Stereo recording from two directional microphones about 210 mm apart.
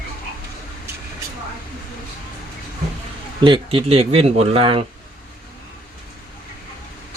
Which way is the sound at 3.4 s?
25° right (ahead or behind).